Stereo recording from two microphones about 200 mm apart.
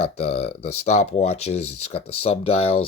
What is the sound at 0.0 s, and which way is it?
Speech, 30° left (ahead or behind).